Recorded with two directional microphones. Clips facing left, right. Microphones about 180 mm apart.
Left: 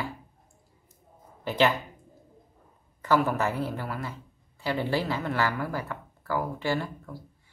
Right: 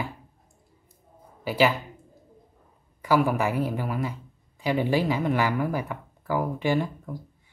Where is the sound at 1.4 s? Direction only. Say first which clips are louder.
Right 2 dB; 10° right (ahead or behind).